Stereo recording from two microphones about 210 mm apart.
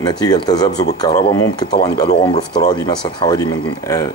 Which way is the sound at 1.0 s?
20° left (ahead or behind).